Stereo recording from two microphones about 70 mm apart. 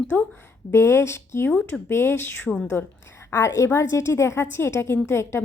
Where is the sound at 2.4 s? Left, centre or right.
Centre.